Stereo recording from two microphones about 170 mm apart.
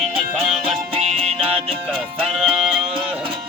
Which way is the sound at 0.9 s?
40° right (ahead or behind).